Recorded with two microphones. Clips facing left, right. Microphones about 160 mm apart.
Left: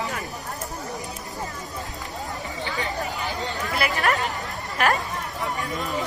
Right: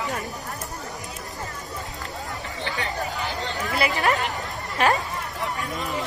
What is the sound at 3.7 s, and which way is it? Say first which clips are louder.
Speech: right 1 dB; 20° right (ahead or behind).